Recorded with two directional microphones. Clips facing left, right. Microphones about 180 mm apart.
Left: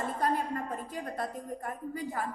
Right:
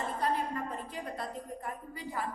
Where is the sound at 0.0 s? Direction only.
45° left (ahead or behind).